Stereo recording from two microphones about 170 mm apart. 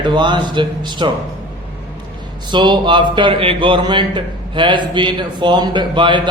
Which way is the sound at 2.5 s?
25° right (ahead or behind).